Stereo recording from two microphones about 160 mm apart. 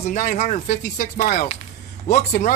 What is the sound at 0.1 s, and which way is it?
Speech, 55° left (ahead or behind).